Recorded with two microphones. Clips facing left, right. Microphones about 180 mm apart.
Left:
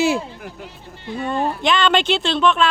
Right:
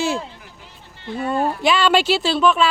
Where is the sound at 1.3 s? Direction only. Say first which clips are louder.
Right 1 dB; 5° right (ahead or behind).